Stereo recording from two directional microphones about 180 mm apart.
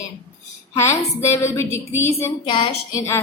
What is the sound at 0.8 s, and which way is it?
A woman's voice, 15° left (ahead or behind).